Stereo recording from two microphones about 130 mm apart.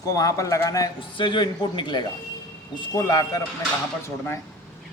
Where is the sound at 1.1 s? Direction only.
40° left (ahead or behind).